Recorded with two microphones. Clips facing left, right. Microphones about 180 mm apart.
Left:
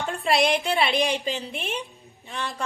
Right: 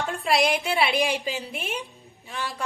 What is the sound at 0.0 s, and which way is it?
A woman's voice, centre (ahead or behind).